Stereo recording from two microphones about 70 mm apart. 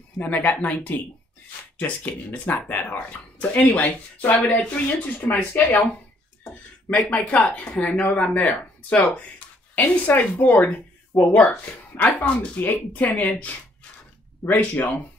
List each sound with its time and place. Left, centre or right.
0.2 s speech: left
5.7 s speech: centre
7.1 s speech: centre
14.5 s speech: left